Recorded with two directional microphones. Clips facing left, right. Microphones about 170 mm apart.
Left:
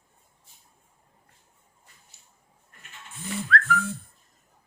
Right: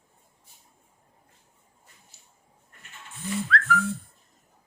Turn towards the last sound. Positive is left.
turn(degrees=50)  # may be behind; listen again after turning